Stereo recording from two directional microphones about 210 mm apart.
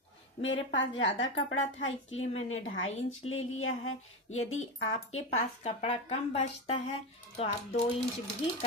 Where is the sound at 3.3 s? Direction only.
70° left (ahead or behind).